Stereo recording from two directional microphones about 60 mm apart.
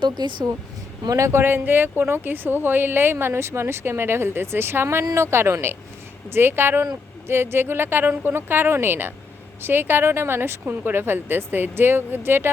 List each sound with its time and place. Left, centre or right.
1.0 s a man's voice: right
1.4 s speech: right